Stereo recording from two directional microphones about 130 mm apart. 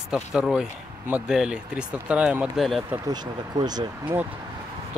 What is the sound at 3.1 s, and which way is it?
Speech, 30° right (ahead or behind).